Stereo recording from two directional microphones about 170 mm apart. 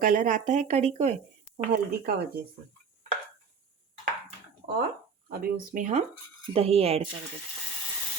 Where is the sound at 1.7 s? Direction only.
65° right (ahead or behind).